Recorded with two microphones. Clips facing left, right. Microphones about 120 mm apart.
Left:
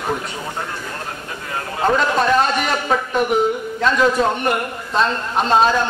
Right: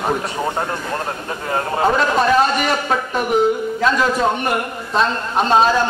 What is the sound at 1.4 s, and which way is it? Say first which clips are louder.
Vehicle: right 7 dB; 40° right (ahead or behind).